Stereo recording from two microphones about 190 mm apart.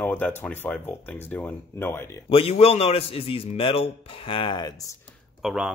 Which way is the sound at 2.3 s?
30° left (ahead or behind).